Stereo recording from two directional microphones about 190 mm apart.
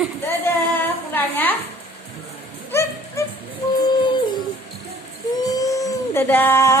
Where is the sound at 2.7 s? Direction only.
15° left (ahead or behind).